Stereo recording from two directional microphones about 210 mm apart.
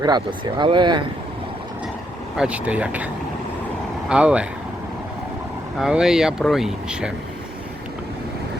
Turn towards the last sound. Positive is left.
turn(degrees=-5)  # may be behind; listen again after turning